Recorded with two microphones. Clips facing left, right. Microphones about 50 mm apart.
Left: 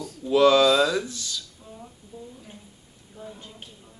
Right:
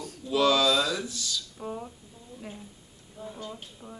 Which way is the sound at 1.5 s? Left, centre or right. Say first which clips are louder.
Right 9 dB; right.